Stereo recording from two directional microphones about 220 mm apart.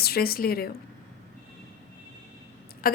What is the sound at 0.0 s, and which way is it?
Speech, 45° left (ahead or behind).